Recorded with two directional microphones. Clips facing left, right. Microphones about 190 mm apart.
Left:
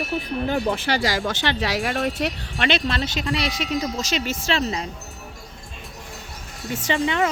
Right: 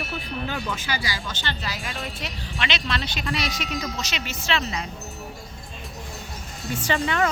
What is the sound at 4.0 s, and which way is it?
Speech, 45° left (ahead or behind).